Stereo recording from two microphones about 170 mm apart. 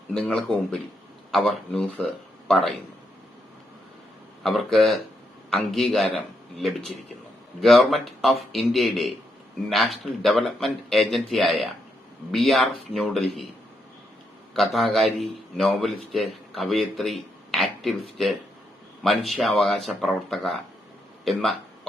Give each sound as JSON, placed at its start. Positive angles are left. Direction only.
{"t": 0.1, "sound": "a man's voice", "side_deg": 5}
{"t": 4.4, "sound": "a man's voice", "side_deg": 0}
{"t": 14.5, "sound": "a man's voice", "side_deg": 0}